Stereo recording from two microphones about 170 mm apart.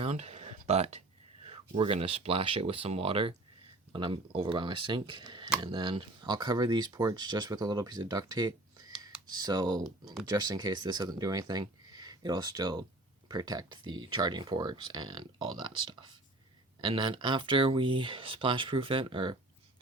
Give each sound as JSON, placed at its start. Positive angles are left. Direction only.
{"t": 0.0, "sound": "a sound", "side_deg": -40}
{"t": 0.7, "sound": "speech", "side_deg": -40}
{"t": 9.7, "sound": "speech", "side_deg": 0}
{"t": 10.2, "sound": "speech", "side_deg": -25}